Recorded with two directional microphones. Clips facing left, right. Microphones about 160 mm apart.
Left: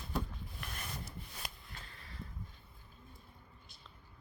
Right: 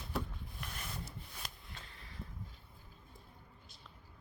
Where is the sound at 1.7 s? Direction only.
20° right (ahead or behind).